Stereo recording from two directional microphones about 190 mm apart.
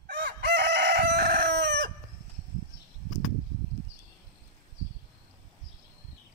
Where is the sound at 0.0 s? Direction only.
55° right (ahead or behind).